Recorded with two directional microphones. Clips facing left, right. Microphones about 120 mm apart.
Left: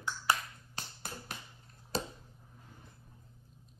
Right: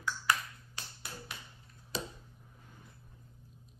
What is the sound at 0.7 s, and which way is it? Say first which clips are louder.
Finger snapping: left 4 dB; 45° left (ahead or behind).